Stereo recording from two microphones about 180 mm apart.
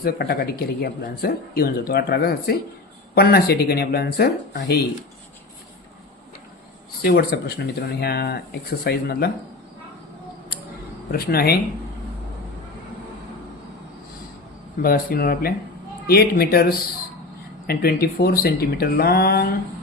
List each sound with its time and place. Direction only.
0.0 s speech: 60° left (ahead or behind)
7.0 s speech: 60° left (ahead or behind)
11.1 s speech: 60° left (ahead or behind)
14.8 s speech: 55° left (ahead or behind)